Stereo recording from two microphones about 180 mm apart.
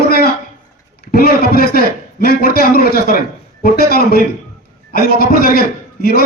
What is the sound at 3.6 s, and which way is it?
A man's voice, 60° left (ahead or behind).